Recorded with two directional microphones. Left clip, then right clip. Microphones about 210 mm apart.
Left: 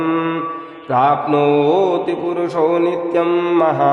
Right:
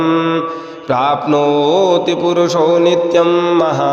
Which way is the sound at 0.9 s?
20° right (ahead or behind).